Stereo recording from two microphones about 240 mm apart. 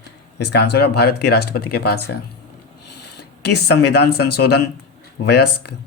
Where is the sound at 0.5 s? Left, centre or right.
Left.